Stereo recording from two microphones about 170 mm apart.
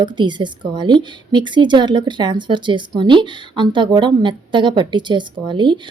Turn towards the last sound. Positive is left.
turn(degrees=-30)  # may be behind; listen again after turning